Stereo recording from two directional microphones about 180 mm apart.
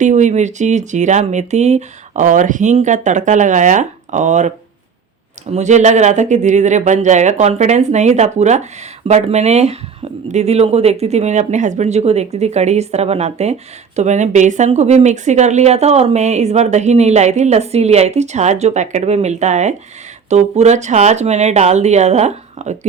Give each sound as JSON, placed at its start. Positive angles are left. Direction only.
{"t": 0.0, "sound": "speech", "side_deg": -40}